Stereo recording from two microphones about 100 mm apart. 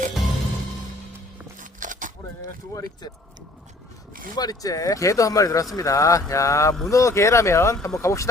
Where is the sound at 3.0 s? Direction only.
45° left (ahead or behind).